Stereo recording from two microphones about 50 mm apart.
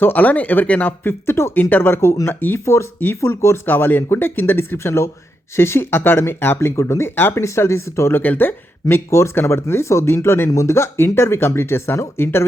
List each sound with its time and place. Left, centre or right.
0.0 s speech: left
1.3 s speech: left
1.7 s speech: left
2.3 s speech: left
3.2 s speech: left
3.7 s speech: left
7.2 s speech: left
7.4 s speech: left
8.1 s speech: left
9.0 s speech: left
10.9 s speech: left